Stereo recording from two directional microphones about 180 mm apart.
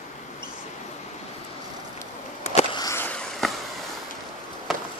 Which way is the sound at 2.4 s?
35° left (ahead or behind).